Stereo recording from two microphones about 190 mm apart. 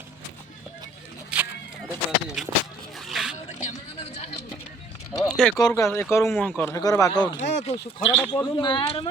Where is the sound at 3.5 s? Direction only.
40° left (ahead or behind).